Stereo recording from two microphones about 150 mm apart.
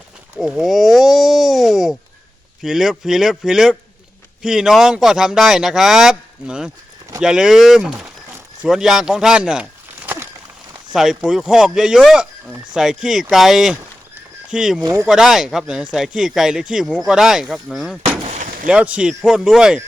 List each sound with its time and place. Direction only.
0.3 s speech: 5° right (ahead or behind)
10.1 s a sound: 10° right (ahead or behind)
10.9 s speech: 5° right (ahead or behind)
14.8 s speech: 25° right (ahead or behind)
15.0 s speech: 5° right (ahead or behind)